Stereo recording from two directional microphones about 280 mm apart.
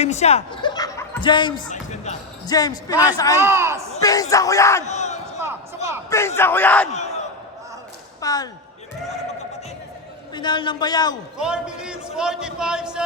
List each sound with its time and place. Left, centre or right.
0.0 s speech: left
1.6 s basketball bounce: left
2.5 s speech: centre
3.4 s speech: centre
3.9 s speech: centre
4.9 s crowd: left
5.4 s a sound: centre
6.1 s speech: centre
8.2 s speech: centre
10.3 s speech: centre
11.3 s a man's voice: centre